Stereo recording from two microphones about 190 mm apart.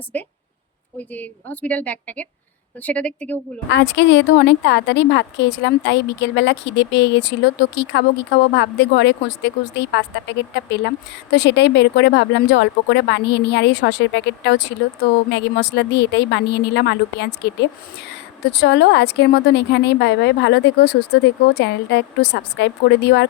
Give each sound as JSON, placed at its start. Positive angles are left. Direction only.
{"t": 0.1, "sound": "a woman's voice", "side_deg": 10}
{"t": 3.7, "sound": "speech", "side_deg": 65}